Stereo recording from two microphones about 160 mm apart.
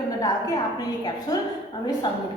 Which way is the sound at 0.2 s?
20° left (ahead or behind).